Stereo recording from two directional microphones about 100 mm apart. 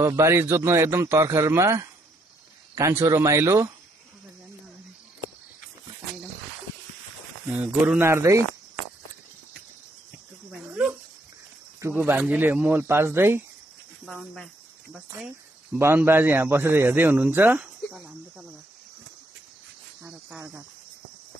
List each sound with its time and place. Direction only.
0.0 s speech: 30° right (ahead or behind)
7.4 s speech: 15° right (ahead or behind)
8.0 s speech: 30° right (ahead or behind)
10.7 s dog: 25° right (ahead or behind)
11.9 s speech: 15° right (ahead or behind)
14.0 s cricket: centre (ahead or behind)
15.1 s speech: 10° right (ahead or behind)
16.0 s speech: 20° right (ahead or behind)
20.0 s cricket: 20° right (ahead or behind)